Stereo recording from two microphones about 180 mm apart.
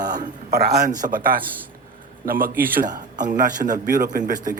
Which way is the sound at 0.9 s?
50° right (ahead or behind).